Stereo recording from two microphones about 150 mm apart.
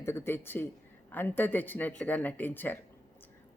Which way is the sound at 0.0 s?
15° left (ahead or behind).